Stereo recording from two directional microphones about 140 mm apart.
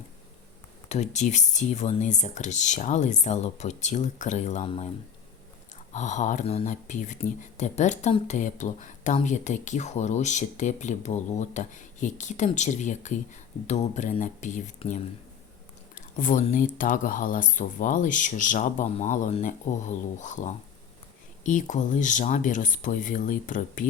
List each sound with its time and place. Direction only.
0.9 s speech: 55° left (ahead or behind)
4.6 s speech: 40° left (ahead or behind)
5.9 s speech: 60° left (ahead or behind)
14.8 s speech: 40° left (ahead or behind)
16.0 s speech: 70° left (ahead or behind)